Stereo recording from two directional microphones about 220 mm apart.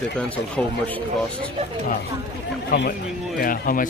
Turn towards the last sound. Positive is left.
turn(degrees=40)  # may be behind; listen again after turning